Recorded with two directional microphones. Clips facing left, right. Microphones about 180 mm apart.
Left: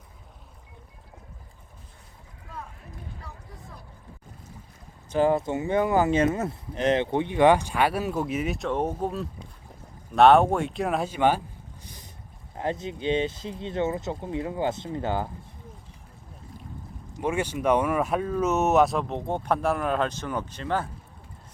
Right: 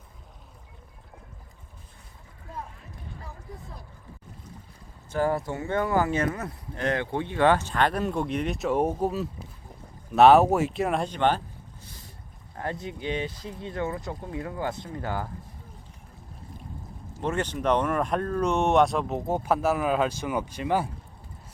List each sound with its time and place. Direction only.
5.0 s speech: 20° left (ahead or behind)
17.2 s speech: 10° left (ahead or behind); by 20.9 s 10° right (ahead or behind)